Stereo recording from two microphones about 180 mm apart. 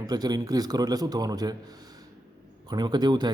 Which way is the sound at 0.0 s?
20° right (ahead or behind).